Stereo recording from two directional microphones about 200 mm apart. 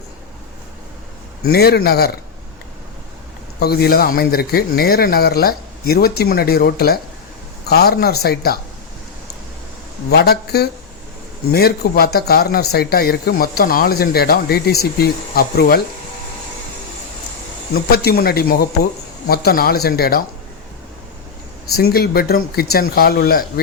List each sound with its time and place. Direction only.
1.5 s speech: 55° left (ahead or behind)
3.6 s speech: 50° left (ahead or behind)
10.1 s speech: 55° left (ahead or behind)
17.8 s speech: 50° left (ahead or behind)
21.8 s speech: 50° left (ahead or behind)